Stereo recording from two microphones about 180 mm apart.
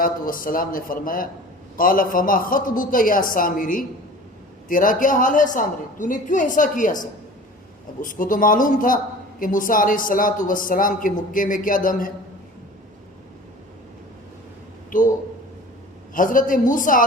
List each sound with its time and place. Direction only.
0.0 s speech: 50° left (ahead or behind)
14.8 s a man's voice: 45° left (ahead or behind)
16.1 s speech: 50° left (ahead or behind)